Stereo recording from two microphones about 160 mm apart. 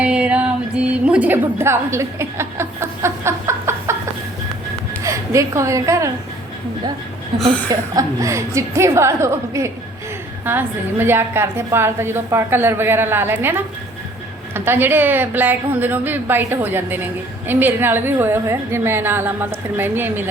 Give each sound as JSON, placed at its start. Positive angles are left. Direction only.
{"t": 0.0, "sound": "music", "side_deg": -5}
{"t": 5.0, "sound": "a woman's voice", "side_deg": -20}
{"t": 7.7, "sound": "a woman's voice", "side_deg": -20}